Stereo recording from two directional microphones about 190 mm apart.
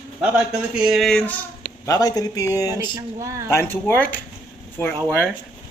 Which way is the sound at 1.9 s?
20° left (ahead or behind).